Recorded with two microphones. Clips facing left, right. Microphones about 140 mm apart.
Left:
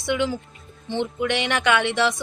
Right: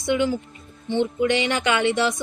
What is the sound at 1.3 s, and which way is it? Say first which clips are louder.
Speech: even; 65° left (ahead or behind).